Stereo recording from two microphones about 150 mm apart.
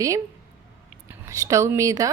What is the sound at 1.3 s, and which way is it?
Speech, 20° right (ahead or behind).